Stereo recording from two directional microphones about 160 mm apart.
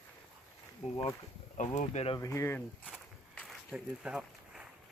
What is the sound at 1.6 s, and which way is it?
Speech, 45° left (ahead or behind).